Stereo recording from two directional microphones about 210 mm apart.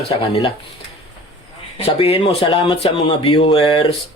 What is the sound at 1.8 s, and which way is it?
Speech, 30° left (ahead or behind).